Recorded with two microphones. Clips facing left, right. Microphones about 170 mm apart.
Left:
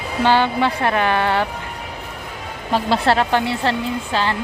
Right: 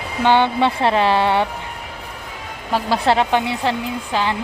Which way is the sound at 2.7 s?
10° right (ahead or behind).